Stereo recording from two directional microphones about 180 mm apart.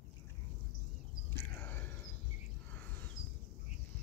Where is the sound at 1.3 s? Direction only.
10° left (ahead or behind).